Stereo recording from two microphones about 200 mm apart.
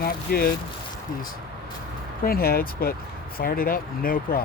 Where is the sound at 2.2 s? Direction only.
50° left (ahead or behind).